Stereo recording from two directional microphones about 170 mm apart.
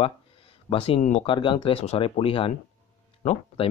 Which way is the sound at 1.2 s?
30° left (ahead or behind).